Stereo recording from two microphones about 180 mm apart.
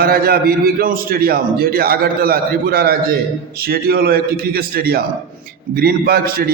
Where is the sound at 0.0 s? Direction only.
55° right (ahead or behind).